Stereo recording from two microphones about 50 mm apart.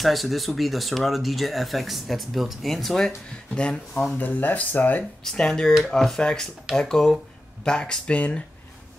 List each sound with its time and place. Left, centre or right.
0.0 s speech: centre
3.5 s speech: left
3.9 s speech: centre
4.2 s speech: left
5.2 s speech: centre